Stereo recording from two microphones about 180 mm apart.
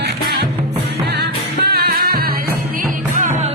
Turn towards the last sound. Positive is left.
turn(degrees=-55)  # may be behind; listen again after turning